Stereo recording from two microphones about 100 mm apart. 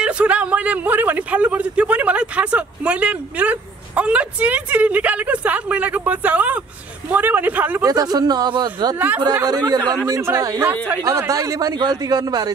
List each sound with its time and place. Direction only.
0.0 s a man's voice: 10° right (ahead or behind)
7.8 s a man's voice: 40° right (ahead or behind)
8.9 s a man's voice: 20° right (ahead or behind)
9.4 s a man's voice: 40° right (ahead or behind)